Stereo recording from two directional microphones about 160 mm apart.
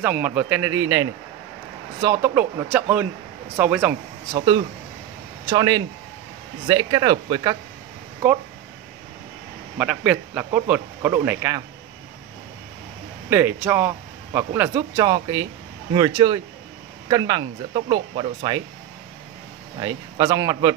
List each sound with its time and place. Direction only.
0.0 s speech: 10° right (ahead or behind)
2.2 s speech: 10° right (ahead or behind)
5.5 s speech: 25° right (ahead or behind)
9.8 s speech: 10° right (ahead or behind)
13.3 s speech: 15° right (ahead or behind); by 18.6 s 30° right (ahead or behind)
19.8 s speech: 25° right (ahead or behind)